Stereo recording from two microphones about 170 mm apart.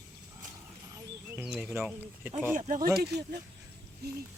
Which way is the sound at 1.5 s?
Centre (ahead or behind).